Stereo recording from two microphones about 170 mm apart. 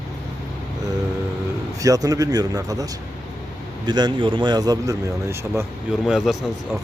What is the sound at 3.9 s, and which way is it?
Speech, 25° right (ahead or behind).